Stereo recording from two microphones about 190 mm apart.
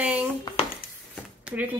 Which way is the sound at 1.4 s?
10° right (ahead or behind).